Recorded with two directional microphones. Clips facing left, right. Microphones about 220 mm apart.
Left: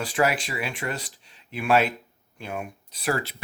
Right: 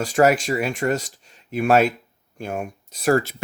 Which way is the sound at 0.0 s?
45° right (ahead or behind).